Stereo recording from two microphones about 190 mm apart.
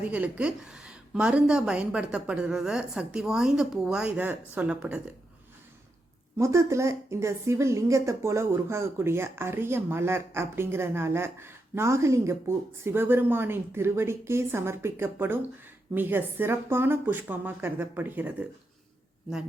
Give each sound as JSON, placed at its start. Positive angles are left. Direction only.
{"t": 0.0, "sound": "a woman's voice", "side_deg": -10}
{"t": 6.3, "sound": "speech", "side_deg": -15}